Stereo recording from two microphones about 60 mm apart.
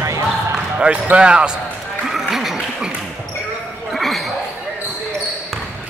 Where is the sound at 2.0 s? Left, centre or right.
Centre.